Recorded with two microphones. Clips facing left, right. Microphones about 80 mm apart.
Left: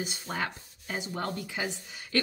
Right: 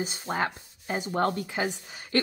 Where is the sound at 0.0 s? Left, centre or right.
Right.